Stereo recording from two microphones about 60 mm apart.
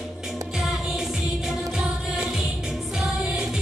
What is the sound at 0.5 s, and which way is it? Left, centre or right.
Music, centre.